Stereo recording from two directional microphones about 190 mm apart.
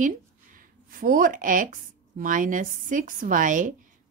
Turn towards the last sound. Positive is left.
turn(degrees=-45)  # may be behind; listen again after turning